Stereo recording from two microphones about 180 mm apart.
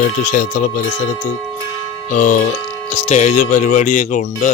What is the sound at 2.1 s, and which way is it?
Speech, 45° left (ahead or behind).